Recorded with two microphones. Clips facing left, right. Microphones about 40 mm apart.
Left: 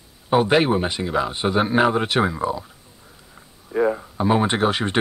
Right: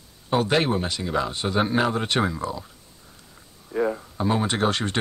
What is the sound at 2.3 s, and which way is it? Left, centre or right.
Speech, centre.